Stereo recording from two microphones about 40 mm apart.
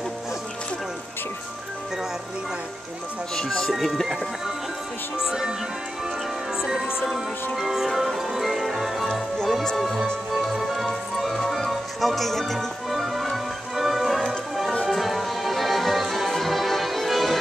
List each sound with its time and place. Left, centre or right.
3.3 s speech: centre
3.7 s speech: centre
5.1 s music: centre
6.6 s music: centre
10.3 s music: centre
11.7 s speech: centre
12.5 s music: centre